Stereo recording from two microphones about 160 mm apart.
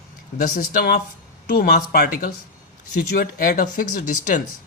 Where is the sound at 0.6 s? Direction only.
75° left (ahead or behind).